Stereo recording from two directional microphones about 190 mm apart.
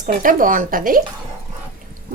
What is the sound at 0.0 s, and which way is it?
Speech, 45° right (ahead or behind).